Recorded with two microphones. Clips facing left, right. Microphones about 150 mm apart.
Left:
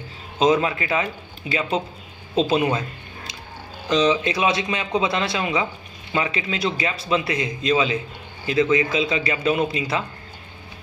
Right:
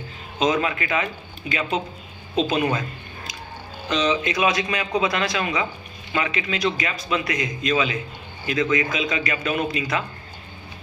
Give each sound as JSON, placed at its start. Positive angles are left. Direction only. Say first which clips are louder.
{"t": 0.4, "sound": "a man's voice", "louder": "left 3 dB", "side_deg": 30}
{"t": 3.9, "sound": "a man's voice", "louder": "left 3 dB", "side_deg": 30}